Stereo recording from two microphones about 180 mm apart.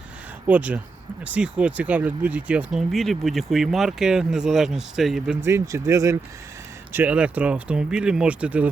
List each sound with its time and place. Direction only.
0.4 s speech: 10° right (ahead or behind)
5.5 s speech: 15° right (ahead or behind)